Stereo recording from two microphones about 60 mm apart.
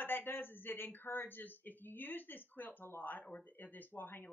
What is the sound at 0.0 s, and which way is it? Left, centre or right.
Speech, left.